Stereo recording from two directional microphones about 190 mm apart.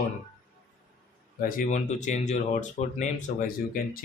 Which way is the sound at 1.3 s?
50° left (ahead or behind).